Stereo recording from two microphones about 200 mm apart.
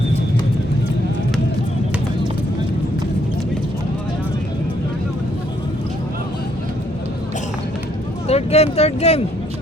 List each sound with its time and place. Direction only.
8.3 s speech: 30° left (ahead or behind)